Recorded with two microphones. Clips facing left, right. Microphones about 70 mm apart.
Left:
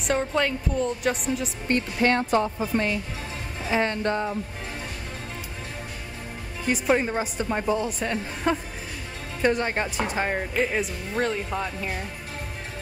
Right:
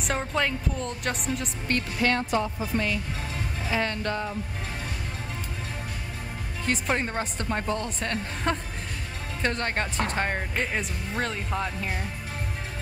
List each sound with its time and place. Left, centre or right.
0.0 s speech: centre
1.7 s speech: left
6.6 s a woman's voice: centre